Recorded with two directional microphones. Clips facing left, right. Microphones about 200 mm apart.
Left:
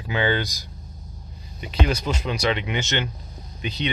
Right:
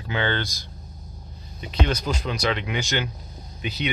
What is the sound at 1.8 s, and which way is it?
Speech, 5° left (ahead or behind).